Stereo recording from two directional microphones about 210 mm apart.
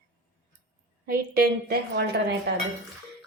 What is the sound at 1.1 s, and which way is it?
A woman's voice, 45° right (ahead or behind).